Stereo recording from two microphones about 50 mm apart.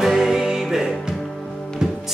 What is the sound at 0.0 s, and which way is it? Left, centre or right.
Music, centre.